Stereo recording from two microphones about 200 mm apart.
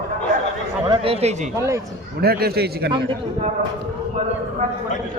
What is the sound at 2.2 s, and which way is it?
Speech, 50° right (ahead or behind).